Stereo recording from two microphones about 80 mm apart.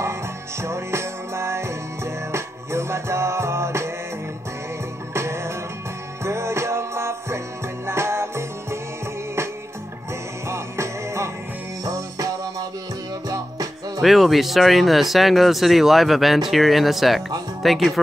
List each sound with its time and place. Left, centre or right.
0.0 s music: right
5.1 s music: right
10.5 s music: right
11.8 s music: right
14.0 s speech: centre